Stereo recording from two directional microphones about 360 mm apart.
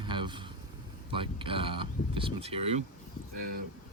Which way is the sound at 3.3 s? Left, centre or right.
Right.